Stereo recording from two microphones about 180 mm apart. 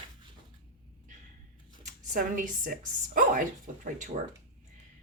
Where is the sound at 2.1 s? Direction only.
50° right (ahead or behind).